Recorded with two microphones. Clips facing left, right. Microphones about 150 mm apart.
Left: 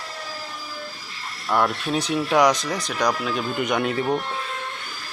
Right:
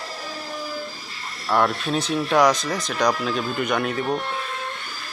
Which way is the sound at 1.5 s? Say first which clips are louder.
Right 1 dB; centre (ahead or behind).